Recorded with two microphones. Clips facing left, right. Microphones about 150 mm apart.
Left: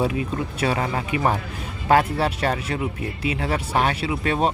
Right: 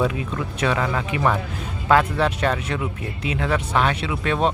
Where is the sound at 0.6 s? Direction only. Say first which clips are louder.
Right 2 dB; 40° left (ahead or behind).